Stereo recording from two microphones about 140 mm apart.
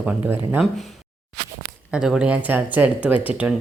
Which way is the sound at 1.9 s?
5° right (ahead or behind).